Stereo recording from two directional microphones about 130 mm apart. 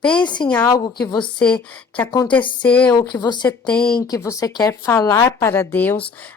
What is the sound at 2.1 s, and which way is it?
Speech, 35° left (ahead or behind).